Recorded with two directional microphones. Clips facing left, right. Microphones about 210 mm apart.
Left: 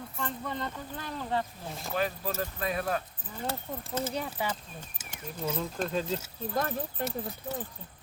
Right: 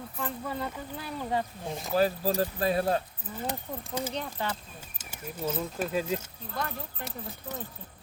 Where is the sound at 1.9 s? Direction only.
35° right (ahead or behind).